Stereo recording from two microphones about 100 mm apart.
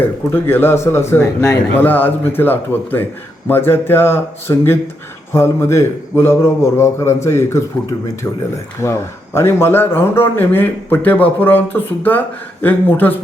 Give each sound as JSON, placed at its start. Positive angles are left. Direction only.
{"t": 0.3, "sound": "speech", "side_deg": 20}
{"t": 1.8, "sound": "speech", "side_deg": 20}
{"t": 8.8, "sound": "speech", "side_deg": 25}